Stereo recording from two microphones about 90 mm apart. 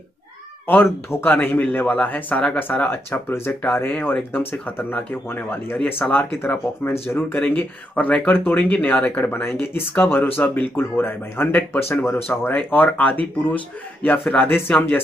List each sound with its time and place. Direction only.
0.7 s speech: 25° left (ahead or behind)
14.3 s speech: 20° left (ahead or behind)